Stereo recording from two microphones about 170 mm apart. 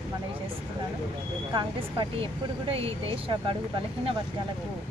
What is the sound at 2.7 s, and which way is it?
Speech, 35° right (ahead or behind).